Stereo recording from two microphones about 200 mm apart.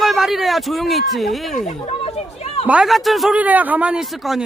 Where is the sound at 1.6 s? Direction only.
30° left (ahead or behind).